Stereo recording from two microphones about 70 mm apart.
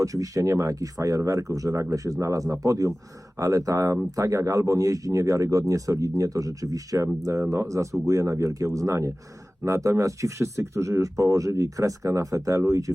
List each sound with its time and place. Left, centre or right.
0.0 s speech: right